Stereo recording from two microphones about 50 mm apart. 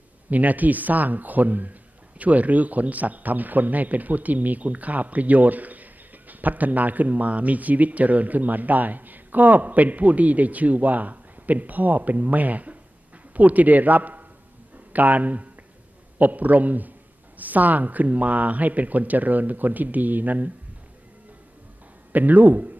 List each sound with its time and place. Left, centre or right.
0.3 s a man's voice: right
22.1 s a man's voice: right